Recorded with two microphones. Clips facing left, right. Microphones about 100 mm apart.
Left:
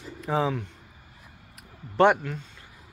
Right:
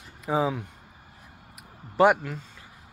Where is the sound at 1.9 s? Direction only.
5° right (ahead or behind).